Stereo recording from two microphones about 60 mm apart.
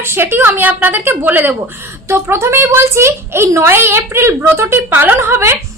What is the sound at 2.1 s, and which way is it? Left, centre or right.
A woman's voice, right.